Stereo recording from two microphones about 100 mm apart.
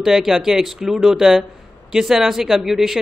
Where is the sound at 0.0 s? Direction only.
5° right (ahead or behind).